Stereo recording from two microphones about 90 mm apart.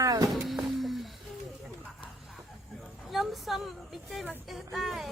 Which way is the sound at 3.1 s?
Centre (ahead or behind).